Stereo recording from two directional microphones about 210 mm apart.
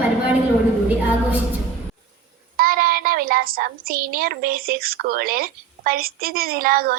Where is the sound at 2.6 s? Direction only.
45° right (ahead or behind).